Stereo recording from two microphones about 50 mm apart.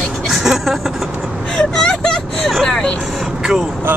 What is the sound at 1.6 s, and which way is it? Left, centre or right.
Speech, centre.